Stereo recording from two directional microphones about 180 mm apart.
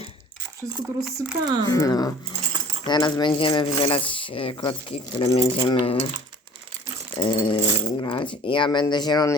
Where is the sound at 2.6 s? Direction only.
35° right (ahead or behind).